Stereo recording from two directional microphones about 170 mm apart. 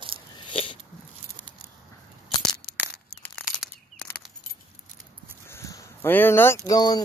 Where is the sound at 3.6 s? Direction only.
Centre (ahead or behind).